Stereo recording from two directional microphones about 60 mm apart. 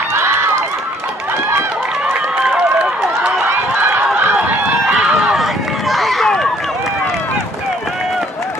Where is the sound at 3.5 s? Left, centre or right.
Right.